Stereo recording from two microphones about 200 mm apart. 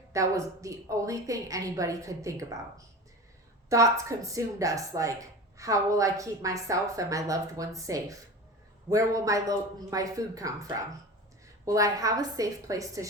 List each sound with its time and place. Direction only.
0.1 s a woman's voice: 15° right (ahead or behind)